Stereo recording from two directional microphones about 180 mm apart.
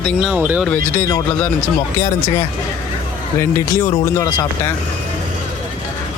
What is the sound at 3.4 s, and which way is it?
Speech, 15° left (ahead or behind).